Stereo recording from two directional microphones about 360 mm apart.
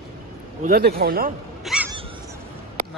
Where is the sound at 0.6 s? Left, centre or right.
Right.